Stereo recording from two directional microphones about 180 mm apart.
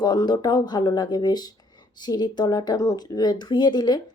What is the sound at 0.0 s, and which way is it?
Speech, 20° left (ahead or behind).